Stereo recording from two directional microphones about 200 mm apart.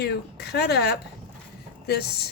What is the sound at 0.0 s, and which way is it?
Speech, 55° left (ahead or behind).